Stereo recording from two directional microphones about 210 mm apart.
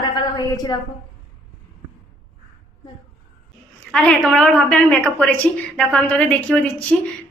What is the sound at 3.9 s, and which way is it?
A woman's voice, 5° left (ahead or behind).